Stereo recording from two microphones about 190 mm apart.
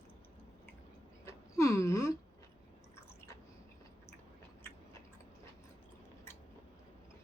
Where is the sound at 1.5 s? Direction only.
15° left (ahead or behind).